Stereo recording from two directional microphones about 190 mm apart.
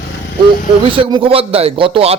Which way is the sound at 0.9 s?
25° right (ahead or behind).